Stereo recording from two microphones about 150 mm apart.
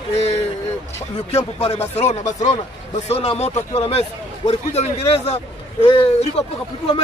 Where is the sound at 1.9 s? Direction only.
50° left (ahead or behind).